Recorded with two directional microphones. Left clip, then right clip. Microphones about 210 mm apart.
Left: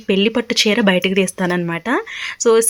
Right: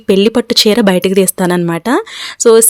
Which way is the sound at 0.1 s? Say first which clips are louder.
Right 7 dB; 50° right (ahead or behind).